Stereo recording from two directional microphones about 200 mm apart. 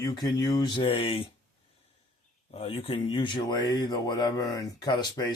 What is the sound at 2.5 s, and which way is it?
Speech, 30° left (ahead or behind).